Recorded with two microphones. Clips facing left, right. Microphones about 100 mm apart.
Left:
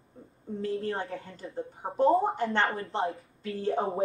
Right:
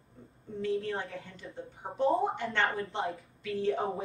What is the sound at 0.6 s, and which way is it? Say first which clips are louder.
A woman's voice: left 1 dB; 35° left (ahead or behind).